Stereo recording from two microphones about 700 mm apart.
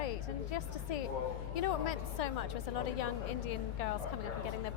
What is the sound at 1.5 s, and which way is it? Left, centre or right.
Speech, left.